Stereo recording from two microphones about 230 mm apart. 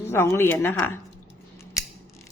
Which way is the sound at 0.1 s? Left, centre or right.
Centre.